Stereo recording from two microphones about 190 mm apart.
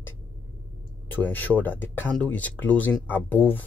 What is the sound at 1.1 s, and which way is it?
Speech, 10° left (ahead or behind).